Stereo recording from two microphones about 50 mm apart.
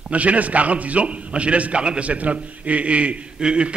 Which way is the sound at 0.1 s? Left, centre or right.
Right.